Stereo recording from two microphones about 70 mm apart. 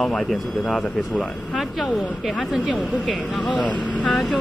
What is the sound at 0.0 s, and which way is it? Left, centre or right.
Speech, centre.